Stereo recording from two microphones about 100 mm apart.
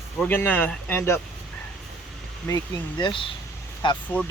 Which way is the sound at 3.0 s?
55° left (ahead or behind).